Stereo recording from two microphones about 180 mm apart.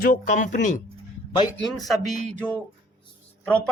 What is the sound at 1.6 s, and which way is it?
Speech, centre (ahead or behind).